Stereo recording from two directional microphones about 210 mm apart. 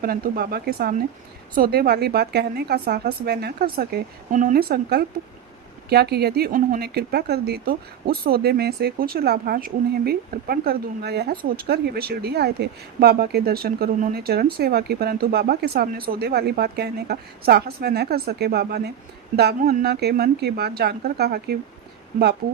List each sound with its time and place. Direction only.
0.0 s speech: 45° right (ahead or behind)